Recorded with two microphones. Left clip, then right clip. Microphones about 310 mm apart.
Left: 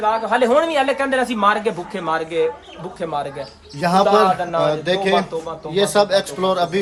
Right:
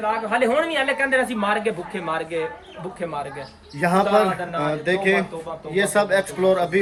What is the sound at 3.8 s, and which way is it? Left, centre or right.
A man's voice, centre.